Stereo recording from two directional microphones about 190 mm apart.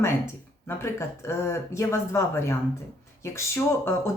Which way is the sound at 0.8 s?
15° left (ahead or behind).